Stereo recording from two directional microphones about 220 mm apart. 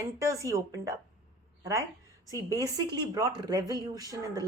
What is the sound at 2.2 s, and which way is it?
A woman's voice, 15° right (ahead or behind).